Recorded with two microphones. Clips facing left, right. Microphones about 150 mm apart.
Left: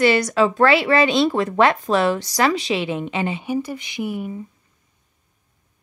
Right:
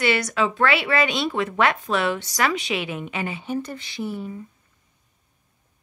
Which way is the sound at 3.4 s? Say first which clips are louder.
Left 4 dB; 10° left (ahead or behind).